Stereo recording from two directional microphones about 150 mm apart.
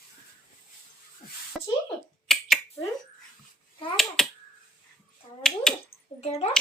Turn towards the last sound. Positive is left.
turn(degrees=45)  # may be behind; listen again after turning